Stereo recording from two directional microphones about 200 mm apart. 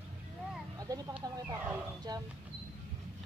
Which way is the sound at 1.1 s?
10° right (ahead or behind).